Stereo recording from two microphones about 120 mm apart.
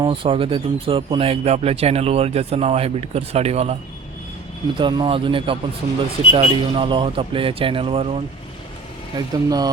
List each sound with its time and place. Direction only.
0.0 s speech: 45° right (ahead or behind); by 3.8 s 60° right (ahead or behind)
4.8 s a man's voice: 40° right (ahead or behind)
9.1 s speech: 35° right (ahead or behind)